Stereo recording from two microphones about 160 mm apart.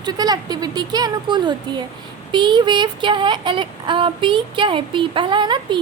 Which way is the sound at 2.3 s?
30° right (ahead or behind).